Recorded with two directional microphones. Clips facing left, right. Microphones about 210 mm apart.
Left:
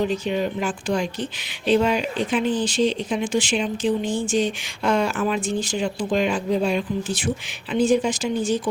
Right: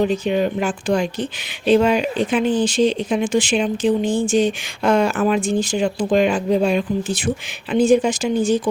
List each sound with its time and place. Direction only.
0.3 s speech: 60° right (ahead or behind)
6.1 s speech: 65° right (ahead or behind)